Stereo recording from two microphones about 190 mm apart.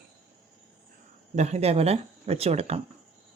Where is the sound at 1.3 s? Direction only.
35° right (ahead or behind).